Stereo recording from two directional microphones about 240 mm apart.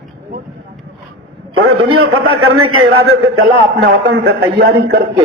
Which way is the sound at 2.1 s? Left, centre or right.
Right.